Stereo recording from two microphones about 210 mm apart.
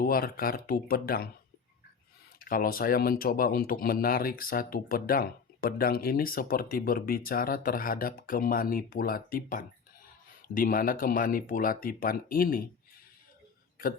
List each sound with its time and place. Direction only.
0.0 s speech: 45° left (ahead or behind)
2.4 s speech: 40° left (ahead or behind)